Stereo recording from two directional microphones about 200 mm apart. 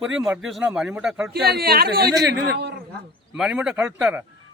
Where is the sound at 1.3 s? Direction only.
55° right (ahead or behind).